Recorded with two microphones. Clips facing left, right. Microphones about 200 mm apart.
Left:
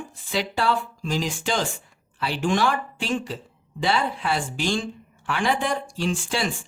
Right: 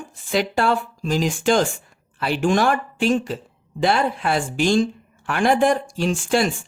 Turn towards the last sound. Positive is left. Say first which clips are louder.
# right 6 dB
turn(degrees=-50)  # may be behind; listen again after turning